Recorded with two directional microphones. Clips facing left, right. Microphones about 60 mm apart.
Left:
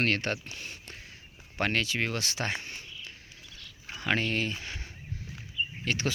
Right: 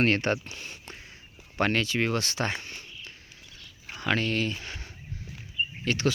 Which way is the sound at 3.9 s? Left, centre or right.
Centre.